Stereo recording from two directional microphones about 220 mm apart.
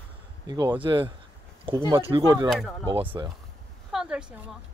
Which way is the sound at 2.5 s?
Centre (ahead or behind).